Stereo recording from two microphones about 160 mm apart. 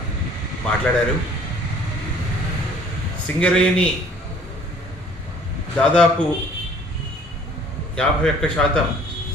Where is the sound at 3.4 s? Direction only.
5° left (ahead or behind).